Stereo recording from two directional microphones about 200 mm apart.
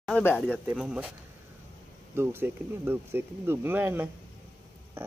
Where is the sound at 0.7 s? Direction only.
5° right (ahead or behind).